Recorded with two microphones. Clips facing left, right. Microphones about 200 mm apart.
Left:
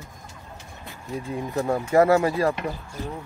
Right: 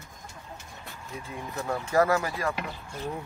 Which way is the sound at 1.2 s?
35° left (ahead or behind).